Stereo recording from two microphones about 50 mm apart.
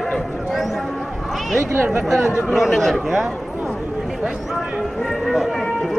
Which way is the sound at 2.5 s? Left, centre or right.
Centre.